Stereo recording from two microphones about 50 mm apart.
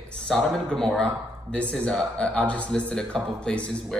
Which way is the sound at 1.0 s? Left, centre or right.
Left.